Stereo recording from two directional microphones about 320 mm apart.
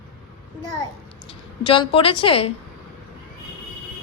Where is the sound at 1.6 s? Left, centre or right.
Centre.